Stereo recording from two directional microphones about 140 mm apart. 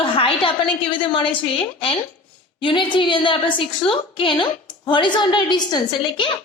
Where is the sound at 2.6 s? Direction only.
35° left (ahead or behind).